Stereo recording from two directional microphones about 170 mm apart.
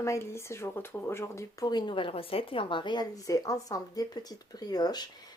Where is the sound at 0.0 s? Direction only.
15° left (ahead or behind).